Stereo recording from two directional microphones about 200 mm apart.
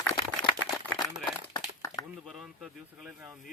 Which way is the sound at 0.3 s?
10° left (ahead or behind).